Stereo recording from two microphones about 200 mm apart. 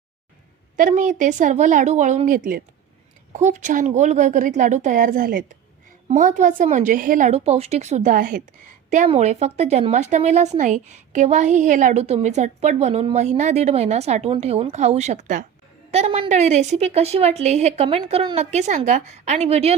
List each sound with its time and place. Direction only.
0.8 s speech: 40° right (ahead or behind)